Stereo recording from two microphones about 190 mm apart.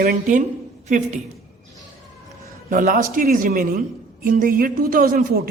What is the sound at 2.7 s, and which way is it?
A woman's voice, 45° right (ahead or behind).